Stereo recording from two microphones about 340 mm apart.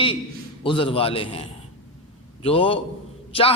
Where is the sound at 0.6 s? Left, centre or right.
Centre.